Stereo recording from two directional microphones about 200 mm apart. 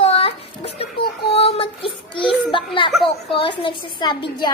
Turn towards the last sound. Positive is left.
turn(degrees=20)  # may be behind; listen again after turning